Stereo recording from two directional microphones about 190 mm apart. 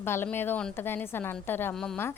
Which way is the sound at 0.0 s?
10° left (ahead or behind).